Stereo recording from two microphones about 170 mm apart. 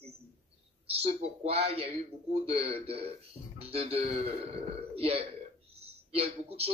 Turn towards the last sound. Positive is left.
turn(degrees=-35)  # may be behind; listen again after turning